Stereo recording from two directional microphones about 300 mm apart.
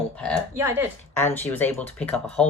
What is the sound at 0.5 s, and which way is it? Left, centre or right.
Speech, centre.